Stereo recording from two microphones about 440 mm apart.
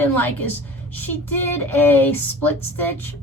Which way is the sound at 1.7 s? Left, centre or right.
Centre.